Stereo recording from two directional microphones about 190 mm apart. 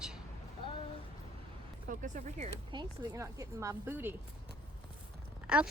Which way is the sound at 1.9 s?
40° right (ahead or behind).